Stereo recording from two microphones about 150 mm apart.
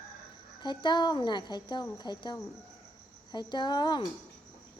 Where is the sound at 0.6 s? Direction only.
30° left (ahead or behind).